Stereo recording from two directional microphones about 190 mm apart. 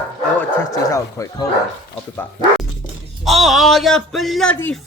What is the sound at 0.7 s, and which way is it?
Speech, 15° left (ahead or behind).